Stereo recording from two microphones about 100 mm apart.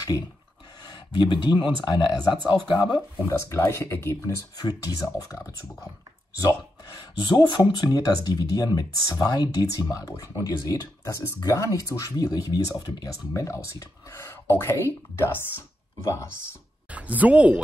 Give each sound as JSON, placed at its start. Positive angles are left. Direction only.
{"t": 0.8, "sound": "speech", "side_deg": 50}
{"t": 3.3, "sound": "speech", "side_deg": 30}
{"t": 7.2, "sound": "speech", "side_deg": 50}
{"t": 16.9, "sound": "speech", "side_deg": -15}